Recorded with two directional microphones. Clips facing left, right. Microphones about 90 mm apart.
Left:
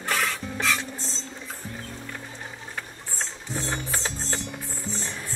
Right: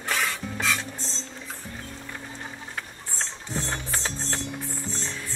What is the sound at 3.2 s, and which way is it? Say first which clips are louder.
Music: even; 5° left (ahead or behind).